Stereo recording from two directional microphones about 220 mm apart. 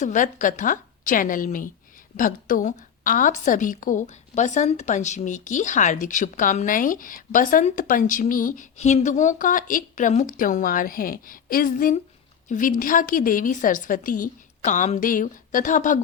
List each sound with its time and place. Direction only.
0.0 s a woman's voice: 35° left (ahead or behind)